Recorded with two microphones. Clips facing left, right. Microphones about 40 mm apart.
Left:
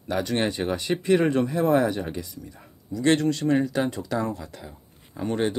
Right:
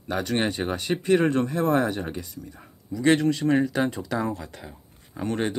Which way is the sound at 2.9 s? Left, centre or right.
Centre.